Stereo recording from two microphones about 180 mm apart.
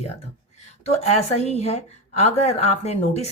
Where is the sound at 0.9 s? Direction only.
35° left (ahead or behind).